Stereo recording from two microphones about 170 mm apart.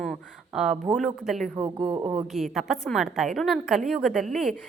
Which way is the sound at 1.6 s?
30° right (ahead or behind).